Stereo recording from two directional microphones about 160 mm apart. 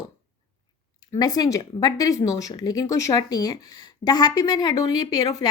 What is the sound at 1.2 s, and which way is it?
Speech, 25° left (ahead or behind).